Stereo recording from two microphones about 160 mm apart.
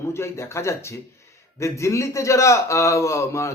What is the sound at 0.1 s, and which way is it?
Speech, 15° left (ahead or behind).